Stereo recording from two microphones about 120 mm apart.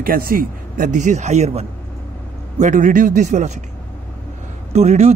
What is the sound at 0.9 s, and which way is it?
Speech, 90° right.